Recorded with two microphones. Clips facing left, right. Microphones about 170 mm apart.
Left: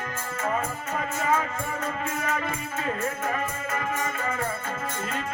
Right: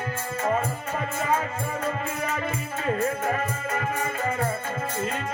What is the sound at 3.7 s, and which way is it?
Music, 35° right (ahead or behind).